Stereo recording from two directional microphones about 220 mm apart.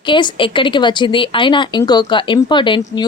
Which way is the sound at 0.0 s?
20° left (ahead or behind).